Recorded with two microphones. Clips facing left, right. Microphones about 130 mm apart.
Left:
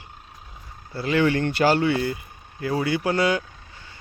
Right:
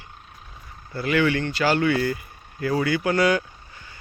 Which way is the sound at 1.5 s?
50° left (ahead or behind).